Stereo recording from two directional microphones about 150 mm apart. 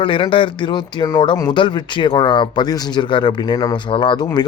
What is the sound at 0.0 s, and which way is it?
Speech, 35° left (ahead or behind).